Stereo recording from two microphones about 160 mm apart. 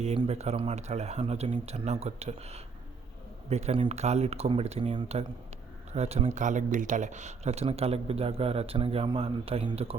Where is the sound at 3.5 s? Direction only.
40° right (ahead or behind).